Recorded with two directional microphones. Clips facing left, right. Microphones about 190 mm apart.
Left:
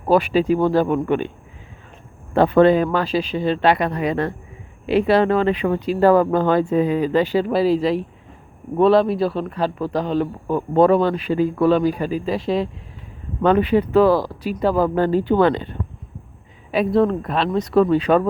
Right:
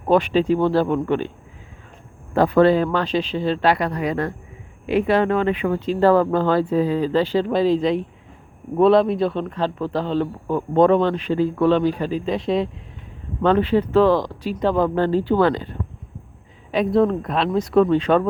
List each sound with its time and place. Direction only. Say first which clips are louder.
0.0 s speech: left 1 dB; 5° left (ahead or behind)
2.3 s speech: left 2 dB; 20° left (ahead or behind)
5.8 s speech: left 1 dB; 10° left (ahead or behind)
13.4 s speech: left 1 dB; 10° left (ahead or behind)
16.7 s speech: even; centre (ahead or behind)